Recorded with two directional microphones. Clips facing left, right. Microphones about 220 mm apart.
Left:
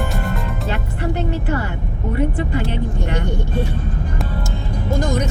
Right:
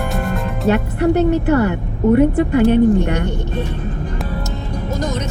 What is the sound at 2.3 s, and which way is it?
Speech, 50° right (ahead or behind).